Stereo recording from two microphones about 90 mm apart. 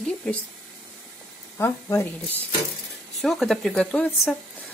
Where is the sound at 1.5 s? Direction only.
30° left (ahead or behind).